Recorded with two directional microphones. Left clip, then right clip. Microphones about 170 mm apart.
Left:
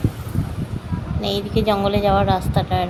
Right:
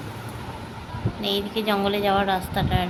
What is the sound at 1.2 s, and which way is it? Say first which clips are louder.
Speech: left 4 dB; 30° left (ahead or behind).